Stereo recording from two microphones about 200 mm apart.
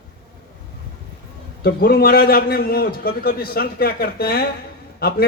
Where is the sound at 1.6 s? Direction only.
50° left (ahead or behind).